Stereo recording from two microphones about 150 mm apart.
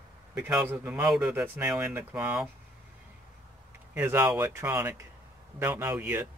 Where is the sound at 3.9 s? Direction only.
15° right (ahead or behind).